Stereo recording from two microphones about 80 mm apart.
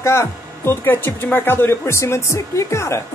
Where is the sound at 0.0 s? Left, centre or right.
Left.